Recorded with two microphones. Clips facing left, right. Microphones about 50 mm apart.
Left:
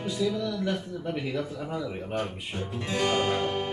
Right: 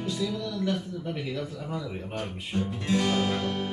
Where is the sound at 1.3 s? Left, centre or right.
Left.